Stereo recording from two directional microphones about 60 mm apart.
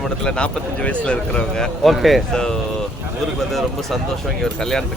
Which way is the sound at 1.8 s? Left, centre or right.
Centre.